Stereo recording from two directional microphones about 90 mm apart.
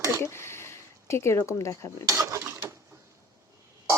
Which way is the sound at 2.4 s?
25° right (ahead or behind).